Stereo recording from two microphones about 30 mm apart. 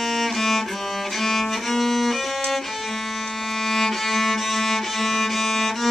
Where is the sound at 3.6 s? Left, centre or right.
Centre.